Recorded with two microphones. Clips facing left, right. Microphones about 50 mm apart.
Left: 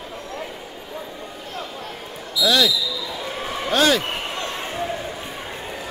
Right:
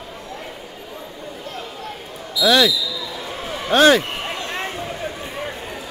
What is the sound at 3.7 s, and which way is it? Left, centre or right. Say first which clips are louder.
Speech: right 5 dB; right.